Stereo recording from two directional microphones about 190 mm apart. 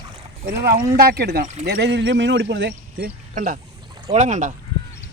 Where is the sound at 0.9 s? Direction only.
55° right (ahead or behind).